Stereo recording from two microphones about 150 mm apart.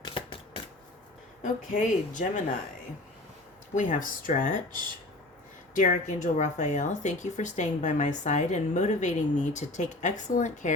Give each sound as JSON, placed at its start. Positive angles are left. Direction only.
{"t": 0.0, "sound": "shuffling cards", "side_deg": 35}
{"t": 1.4, "sound": "a woman's voice", "side_deg": 60}
{"t": 3.8, "sound": "a woman's voice", "side_deg": 60}
{"t": 5.7, "sound": "speech", "side_deg": 55}